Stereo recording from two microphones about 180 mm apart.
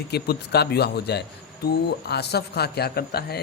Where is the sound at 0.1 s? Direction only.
65° left (ahead or behind).